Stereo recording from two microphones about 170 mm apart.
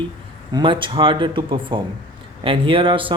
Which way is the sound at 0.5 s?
30° right (ahead or behind).